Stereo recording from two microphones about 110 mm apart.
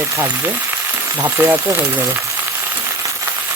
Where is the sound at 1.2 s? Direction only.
20° right (ahead or behind).